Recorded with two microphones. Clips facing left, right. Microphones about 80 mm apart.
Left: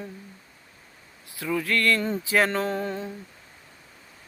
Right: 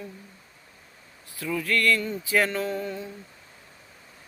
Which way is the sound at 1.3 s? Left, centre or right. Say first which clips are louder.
Left 2 dB; left.